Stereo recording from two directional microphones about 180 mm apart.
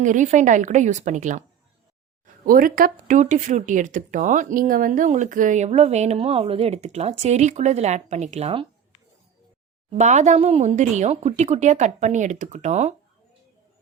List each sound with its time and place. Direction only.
0.0 s a woman's voice: 45° right (ahead or behind)
9.9 s speech: 40° right (ahead or behind)